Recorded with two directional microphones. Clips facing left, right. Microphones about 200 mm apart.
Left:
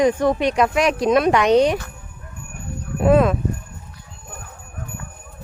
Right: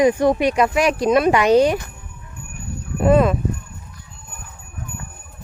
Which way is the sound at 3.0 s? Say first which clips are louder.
Even; centre (ahead or behind).